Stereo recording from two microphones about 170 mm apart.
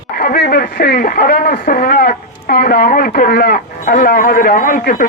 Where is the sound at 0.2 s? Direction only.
60° left (ahead or behind).